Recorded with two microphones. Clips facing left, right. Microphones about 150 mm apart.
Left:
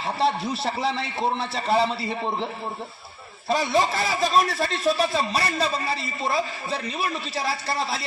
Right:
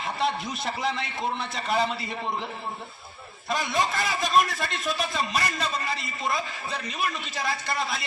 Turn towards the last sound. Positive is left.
turn(degrees=30)  # may be behind; listen again after turning